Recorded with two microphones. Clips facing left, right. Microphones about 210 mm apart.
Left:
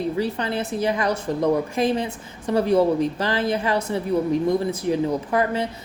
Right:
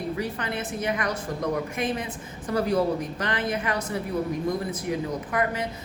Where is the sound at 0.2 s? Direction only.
30° left (ahead or behind).